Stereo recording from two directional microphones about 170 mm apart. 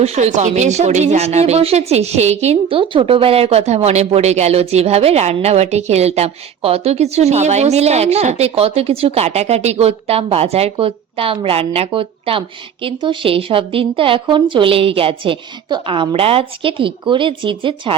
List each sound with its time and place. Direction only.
0.0 s speech: 40° right (ahead or behind)